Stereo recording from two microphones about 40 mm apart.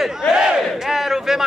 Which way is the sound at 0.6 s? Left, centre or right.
Centre.